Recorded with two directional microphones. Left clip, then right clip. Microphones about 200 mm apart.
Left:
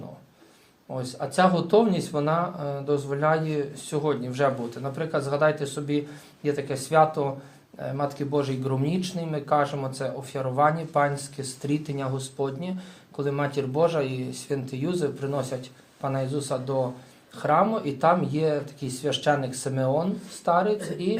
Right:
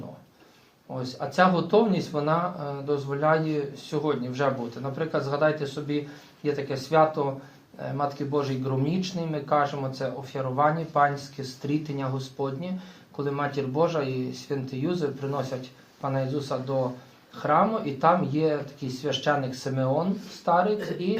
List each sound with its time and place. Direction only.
0.9 s speech: 35° left (ahead or behind)